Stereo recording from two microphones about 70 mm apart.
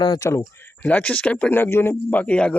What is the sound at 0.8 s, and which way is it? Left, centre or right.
Speech, left.